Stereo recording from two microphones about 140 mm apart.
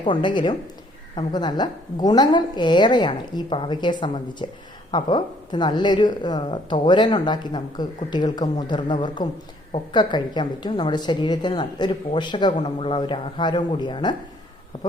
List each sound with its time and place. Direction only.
0.0 s a woman's voice: 35° left (ahead or behind)